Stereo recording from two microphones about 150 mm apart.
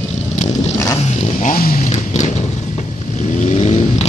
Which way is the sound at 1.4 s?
70° left (ahead or behind).